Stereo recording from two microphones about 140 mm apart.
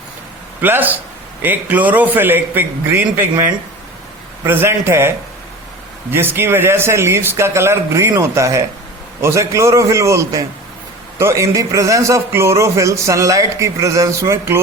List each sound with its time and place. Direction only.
0.6 s a man's voice: 15° right (ahead or behind)